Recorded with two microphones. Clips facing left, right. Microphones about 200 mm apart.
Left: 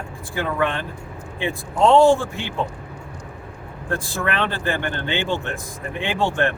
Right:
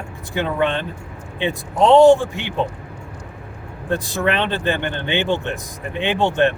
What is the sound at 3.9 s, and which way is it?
Speech, 20° right (ahead or behind).